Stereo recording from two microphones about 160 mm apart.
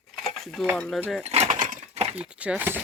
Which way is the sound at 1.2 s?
45° right (ahead or behind).